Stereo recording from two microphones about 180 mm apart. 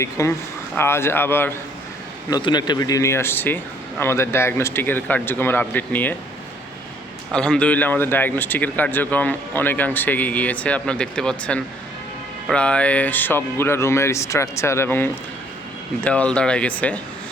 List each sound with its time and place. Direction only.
0.0 s speech: 15° left (ahead or behind)
2.3 s speech: 25° left (ahead or behind)
7.3 s speech: 5° left (ahead or behind)